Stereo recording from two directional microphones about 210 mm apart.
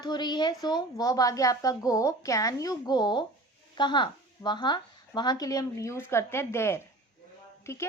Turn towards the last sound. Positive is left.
turn(degrees=10)  # may be behind; listen again after turning